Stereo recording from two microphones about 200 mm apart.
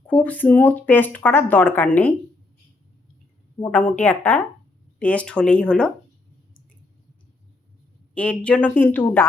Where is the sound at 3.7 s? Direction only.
5° left (ahead or behind).